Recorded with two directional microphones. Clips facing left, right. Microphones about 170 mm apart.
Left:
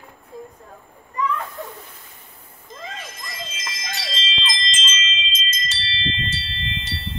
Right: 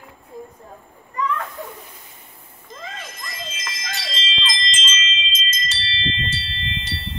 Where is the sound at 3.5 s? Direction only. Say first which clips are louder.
Even; 55° right (ahead or behind).